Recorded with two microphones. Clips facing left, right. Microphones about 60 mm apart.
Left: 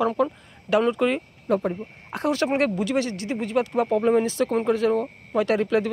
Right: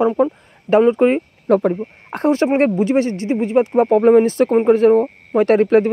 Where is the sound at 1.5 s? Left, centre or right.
Right.